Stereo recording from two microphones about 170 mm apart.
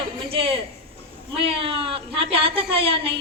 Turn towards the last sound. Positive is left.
turn(degrees=-35)  # may be behind; listen again after turning